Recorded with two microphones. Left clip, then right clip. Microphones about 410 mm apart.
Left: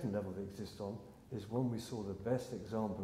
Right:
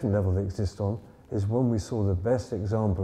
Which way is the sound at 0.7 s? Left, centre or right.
Right.